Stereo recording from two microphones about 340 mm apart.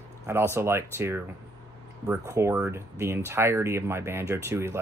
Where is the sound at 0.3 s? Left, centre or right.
Centre.